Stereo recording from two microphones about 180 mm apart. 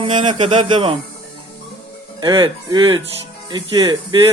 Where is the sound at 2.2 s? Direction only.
25° right (ahead or behind).